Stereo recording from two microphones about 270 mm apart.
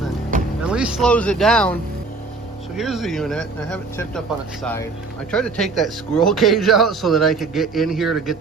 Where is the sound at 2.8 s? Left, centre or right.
Centre.